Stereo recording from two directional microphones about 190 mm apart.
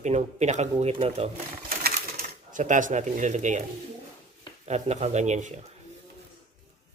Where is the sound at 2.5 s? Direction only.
40° right (ahead or behind).